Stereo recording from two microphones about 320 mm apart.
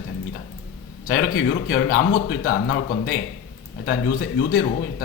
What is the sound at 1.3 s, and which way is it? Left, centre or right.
Speech, left.